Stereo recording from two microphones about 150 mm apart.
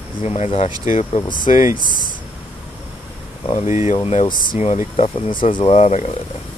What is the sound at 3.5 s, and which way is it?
Speech, 50° left (ahead or behind).